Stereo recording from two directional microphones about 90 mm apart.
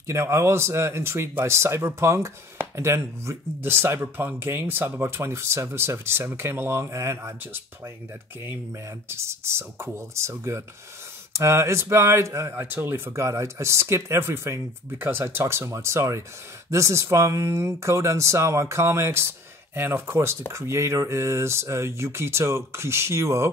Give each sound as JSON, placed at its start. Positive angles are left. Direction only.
{"t": 0.0, "sound": "speech", "side_deg": -30}
{"t": 9.1, "sound": "speech", "side_deg": -30}